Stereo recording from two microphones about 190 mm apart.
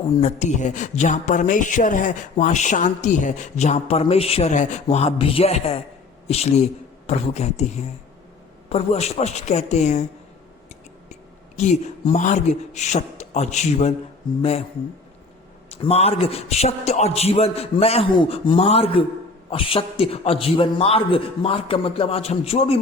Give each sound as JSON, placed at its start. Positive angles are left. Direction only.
{"t": 0.2, "sound": "speech", "side_deg": 40}
{"t": 11.1, "sound": "speech", "side_deg": 40}
{"t": 15.7, "sound": "speech", "side_deg": 30}